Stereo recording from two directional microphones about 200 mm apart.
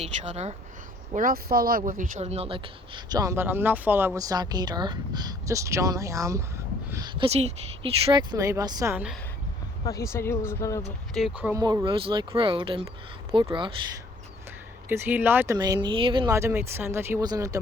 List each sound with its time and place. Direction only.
0.0 s speech: 35° right (ahead or behind)
1.1 s speech: 45° right (ahead or behind); by 9.1 s 10° right (ahead or behind)
9.8 s speech: 15° left (ahead or behind)
11.1 s speech: 5° right (ahead or behind)
11.6 s speech: 20° right (ahead or behind)
14.8 s speech: 10° right (ahead or behind)
15.5 s speech: 20° right (ahead or behind)
16.3 s speech: 15° right (ahead or behind)